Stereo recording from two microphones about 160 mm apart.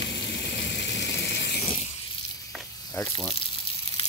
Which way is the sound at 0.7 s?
90° left.